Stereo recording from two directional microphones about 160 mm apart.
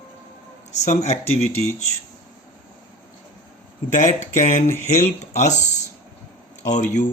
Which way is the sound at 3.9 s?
50° left (ahead or behind).